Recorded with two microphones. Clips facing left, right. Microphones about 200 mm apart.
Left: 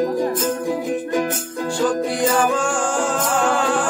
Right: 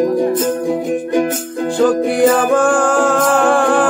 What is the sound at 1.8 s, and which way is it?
Music, 60° right (ahead or behind).